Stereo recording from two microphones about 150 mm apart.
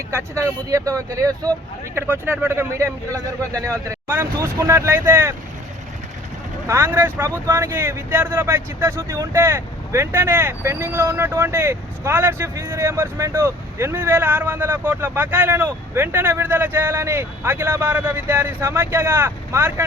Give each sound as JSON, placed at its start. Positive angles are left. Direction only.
{"t": 0.1, "sound": "speech", "side_deg": -20}
{"t": 6.7, "sound": "speech", "side_deg": -15}